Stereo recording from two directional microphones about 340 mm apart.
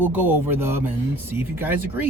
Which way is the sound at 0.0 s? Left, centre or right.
Centre.